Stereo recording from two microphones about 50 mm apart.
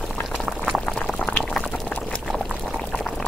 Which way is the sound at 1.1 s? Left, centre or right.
Left.